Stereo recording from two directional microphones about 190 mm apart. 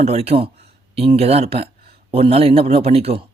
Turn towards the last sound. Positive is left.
turn(degrees=-30)  # may be behind; listen again after turning